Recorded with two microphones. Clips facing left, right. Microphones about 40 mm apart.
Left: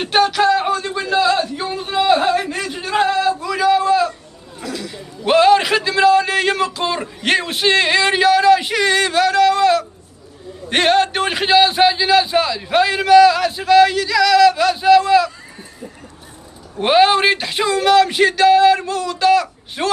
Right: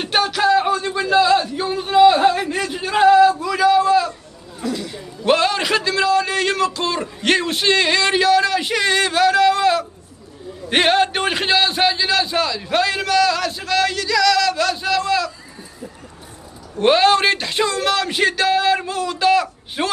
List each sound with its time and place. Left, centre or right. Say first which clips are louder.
0.0 s a sound: left 3 dB; centre
5.2 s a man's voice: left 5 dB; centre
16.8 s speech: left 1 dB; centre